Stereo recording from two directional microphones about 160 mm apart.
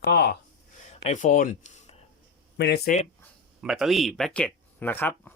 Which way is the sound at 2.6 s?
90° left.